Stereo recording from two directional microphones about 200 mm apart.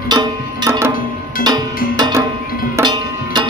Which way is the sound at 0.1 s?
20° right (ahead or behind).